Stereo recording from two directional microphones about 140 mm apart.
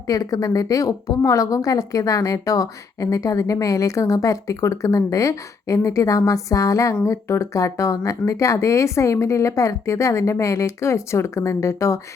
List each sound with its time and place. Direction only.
0.1 s a woman's voice: 25° left (ahead or behind)